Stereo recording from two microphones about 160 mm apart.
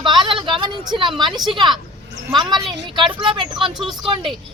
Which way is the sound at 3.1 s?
30° right (ahead or behind).